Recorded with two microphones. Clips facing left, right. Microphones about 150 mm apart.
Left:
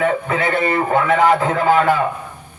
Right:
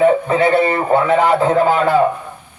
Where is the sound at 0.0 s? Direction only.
30° right (ahead or behind).